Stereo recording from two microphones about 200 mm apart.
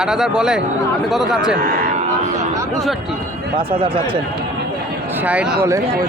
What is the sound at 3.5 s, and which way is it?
Speech, 25° right (ahead or behind).